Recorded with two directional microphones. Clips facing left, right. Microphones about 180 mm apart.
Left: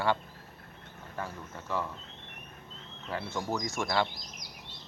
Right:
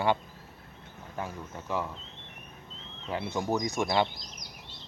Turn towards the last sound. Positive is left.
turn(degrees=-20)  # may be behind; listen again after turning